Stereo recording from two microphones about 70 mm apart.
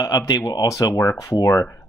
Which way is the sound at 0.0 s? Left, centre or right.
Left.